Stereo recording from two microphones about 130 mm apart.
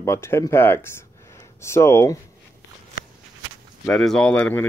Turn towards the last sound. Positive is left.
turn(degrees=10)  # may be behind; listen again after turning